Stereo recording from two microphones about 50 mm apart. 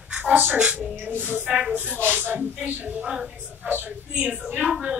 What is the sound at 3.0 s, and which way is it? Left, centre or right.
Speech, centre.